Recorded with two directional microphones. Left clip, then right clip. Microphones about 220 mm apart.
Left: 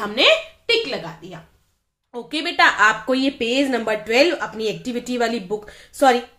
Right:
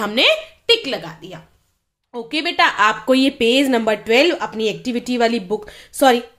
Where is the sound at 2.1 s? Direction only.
20° right (ahead or behind).